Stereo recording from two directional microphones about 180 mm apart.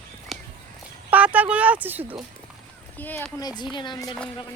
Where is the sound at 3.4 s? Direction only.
25° left (ahead or behind).